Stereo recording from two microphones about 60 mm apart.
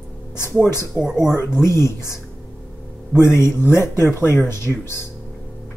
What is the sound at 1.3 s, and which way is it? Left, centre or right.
Speech, left.